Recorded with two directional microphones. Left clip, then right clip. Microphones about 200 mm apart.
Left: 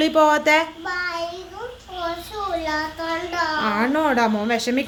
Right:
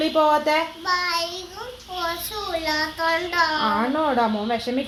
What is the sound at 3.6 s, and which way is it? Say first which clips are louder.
A woman's voice: left 1 dB; 25° left (ahead or behind).